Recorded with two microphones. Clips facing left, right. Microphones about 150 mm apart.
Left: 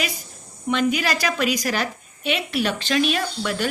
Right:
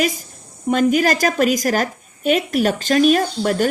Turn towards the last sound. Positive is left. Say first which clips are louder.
# right 7 dB
turn(degrees=-45)  # may be behind; listen again after turning